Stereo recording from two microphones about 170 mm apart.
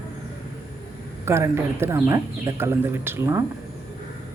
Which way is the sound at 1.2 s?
15° right (ahead or behind).